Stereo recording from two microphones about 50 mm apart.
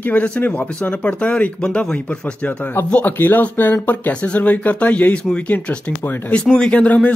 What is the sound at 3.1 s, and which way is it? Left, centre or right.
Speech, left.